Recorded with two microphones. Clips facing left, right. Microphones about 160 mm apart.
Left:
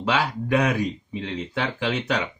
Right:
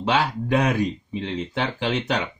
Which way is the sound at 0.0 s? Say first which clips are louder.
Right 2 dB; 25° right (ahead or behind).